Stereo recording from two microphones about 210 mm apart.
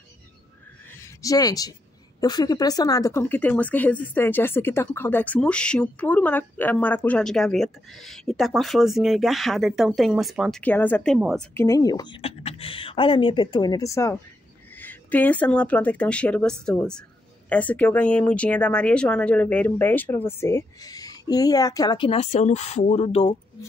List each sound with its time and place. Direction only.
1.0 s speech: 15° left (ahead or behind)
11.1 s a woman's voice: 5° right (ahead or behind)
11.5 s speech: 15° left (ahead or behind)